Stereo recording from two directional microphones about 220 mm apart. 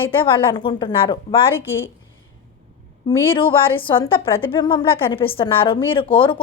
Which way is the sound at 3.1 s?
25° left (ahead or behind).